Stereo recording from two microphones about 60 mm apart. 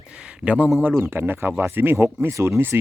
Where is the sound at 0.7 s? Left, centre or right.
Right.